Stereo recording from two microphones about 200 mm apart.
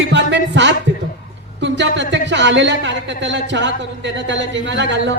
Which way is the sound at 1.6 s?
65° right (ahead or behind).